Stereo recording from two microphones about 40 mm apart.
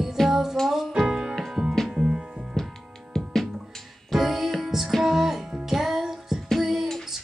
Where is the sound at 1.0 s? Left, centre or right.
Centre.